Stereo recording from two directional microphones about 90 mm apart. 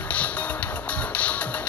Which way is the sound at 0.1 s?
15° left (ahead or behind).